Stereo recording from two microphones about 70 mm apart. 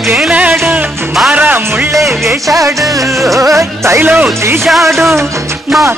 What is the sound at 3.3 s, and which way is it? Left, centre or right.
Music, right.